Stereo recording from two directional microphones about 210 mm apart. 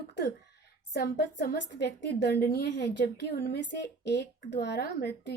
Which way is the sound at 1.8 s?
55° left (ahead or behind).